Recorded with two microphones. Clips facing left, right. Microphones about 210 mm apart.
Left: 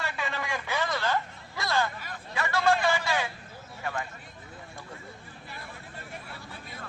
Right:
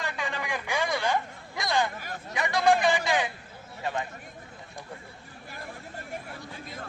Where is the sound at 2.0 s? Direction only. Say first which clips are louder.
Right 3 dB; 45° right (ahead or behind).